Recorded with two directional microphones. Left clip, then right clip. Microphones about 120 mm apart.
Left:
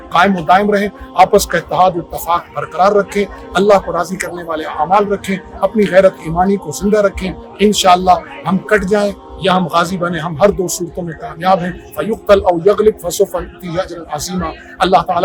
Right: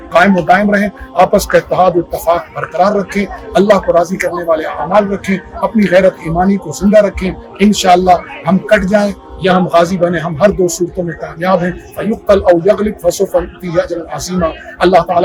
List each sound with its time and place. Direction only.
0.1 s speech: 15° left (ahead or behind)